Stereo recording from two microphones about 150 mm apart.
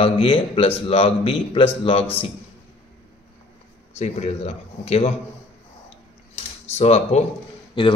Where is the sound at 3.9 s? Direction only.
45° left (ahead or behind).